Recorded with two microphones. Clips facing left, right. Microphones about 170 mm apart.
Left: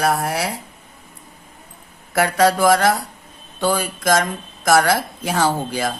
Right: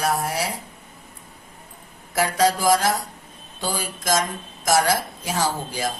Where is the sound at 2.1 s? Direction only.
60° left (ahead or behind).